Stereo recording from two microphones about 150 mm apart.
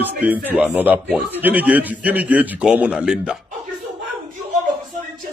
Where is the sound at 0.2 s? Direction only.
10° right (ahead or behind).